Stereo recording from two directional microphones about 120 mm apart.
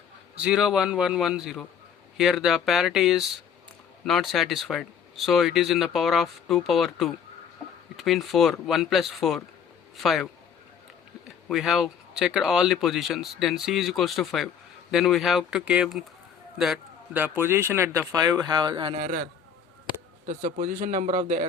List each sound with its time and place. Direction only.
0.3 s speech: 5° right (ahead or behind)
11.4 s speech: centre (ahead or behind)
17.2 s speech: 15° right (ahead or behind); by 18.9 s 40° right (ahead or behind)
20.2 s a man's voice: 90° right